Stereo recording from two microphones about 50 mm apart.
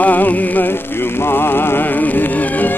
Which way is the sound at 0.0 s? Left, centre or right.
Left.